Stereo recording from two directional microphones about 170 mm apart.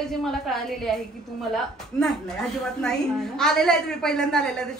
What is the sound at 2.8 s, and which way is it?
A woman's voice, 5° left (ahead or behind).